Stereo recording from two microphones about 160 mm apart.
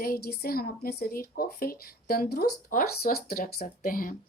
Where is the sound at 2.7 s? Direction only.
65° left (ahead or behind).